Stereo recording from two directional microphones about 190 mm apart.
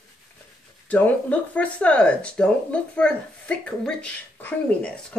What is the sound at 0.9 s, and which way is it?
Speech, 5° left (ahead or behind).